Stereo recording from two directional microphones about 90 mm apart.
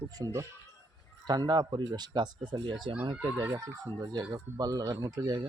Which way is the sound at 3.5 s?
40° right (ahead or behind).